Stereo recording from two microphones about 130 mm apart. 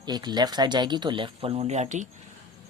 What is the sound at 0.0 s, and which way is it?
Speech, 30° right (ahead or behind).